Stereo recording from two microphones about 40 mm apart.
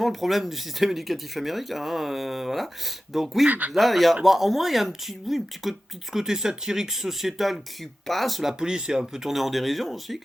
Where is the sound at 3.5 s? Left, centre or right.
Right.